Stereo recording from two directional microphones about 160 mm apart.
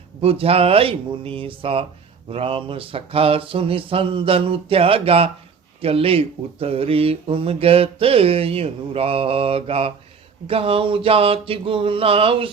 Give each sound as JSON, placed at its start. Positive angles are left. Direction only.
{"t": 0.2, "sound": "speech", "side_deg": -35}